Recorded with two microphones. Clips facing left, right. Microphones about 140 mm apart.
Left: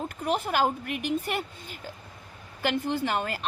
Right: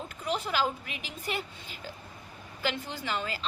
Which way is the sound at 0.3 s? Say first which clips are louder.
Left 4 dB; 55° left (ahead or behind).